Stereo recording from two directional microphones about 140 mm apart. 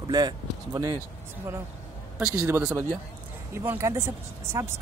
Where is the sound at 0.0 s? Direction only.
30° right (ahead or behind).